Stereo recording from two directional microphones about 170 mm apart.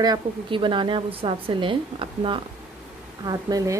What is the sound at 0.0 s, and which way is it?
A woman's voice, 25° right (ahead or behind).